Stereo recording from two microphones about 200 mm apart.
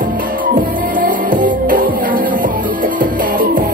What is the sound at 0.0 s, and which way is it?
Music, 40° right (ahead or behind).